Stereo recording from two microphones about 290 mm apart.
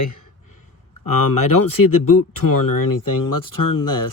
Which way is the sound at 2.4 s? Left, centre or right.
Left.